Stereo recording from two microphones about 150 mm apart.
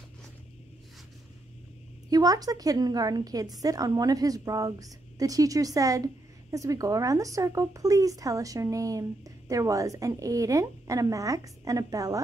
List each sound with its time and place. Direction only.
2.0 s a woman's voice: 25° right (ahead or behind)